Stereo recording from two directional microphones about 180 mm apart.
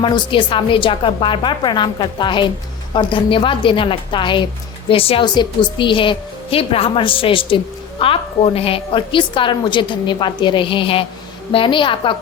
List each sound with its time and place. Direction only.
0.0 s a woman's voice: 25° left (ahead or behind)